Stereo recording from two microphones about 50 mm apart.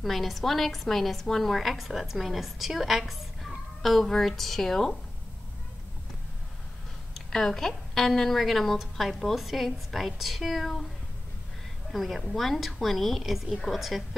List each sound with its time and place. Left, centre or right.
0.0 s a woman's voice: centre
7.2 s a woman's voice: centre
11.9 s a woman's voice: centre